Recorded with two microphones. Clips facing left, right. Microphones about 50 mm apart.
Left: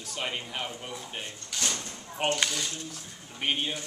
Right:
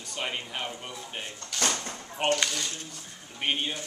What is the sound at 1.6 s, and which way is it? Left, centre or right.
Speech, right.